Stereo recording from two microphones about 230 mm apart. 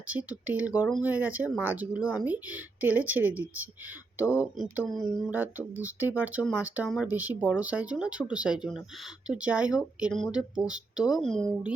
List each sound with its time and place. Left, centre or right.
0.1 s speech: centre